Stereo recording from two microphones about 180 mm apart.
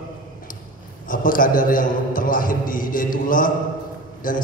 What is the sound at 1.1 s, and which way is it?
A man's voice, 50° left (ahead or behind).